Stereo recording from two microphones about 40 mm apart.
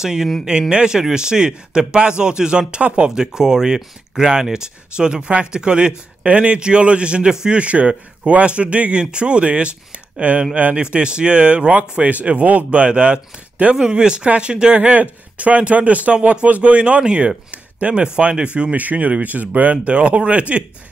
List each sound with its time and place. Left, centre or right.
0.0 s a man's voice: centre; by 20.6 s right